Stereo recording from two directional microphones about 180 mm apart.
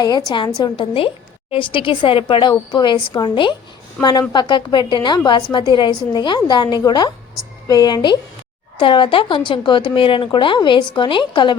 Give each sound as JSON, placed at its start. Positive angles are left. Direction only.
{"t": 0.3, "sound": "a woman's voice", "side_deg": 25}